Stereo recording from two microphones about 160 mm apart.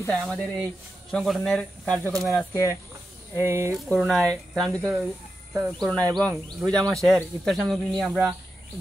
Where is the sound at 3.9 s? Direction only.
5° left (ahead or behind).